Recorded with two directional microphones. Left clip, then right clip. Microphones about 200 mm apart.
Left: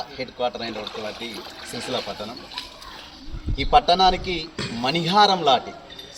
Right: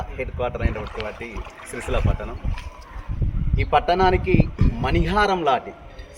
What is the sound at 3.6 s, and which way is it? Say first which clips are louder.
Speech: left 2 dB; 25° right (ahead or behind).